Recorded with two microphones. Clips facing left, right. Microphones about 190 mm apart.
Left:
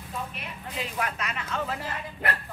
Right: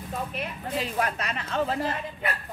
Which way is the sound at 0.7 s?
35° right (ahead or behind).